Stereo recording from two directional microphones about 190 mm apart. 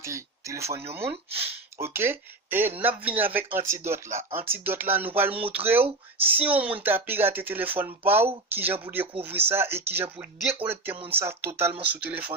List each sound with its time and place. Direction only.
0.0 s speech: 15° right (ahead or behind)